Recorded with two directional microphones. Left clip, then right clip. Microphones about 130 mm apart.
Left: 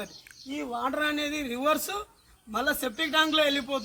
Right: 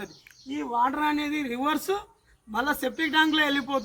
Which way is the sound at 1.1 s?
30° left (ahead or behind).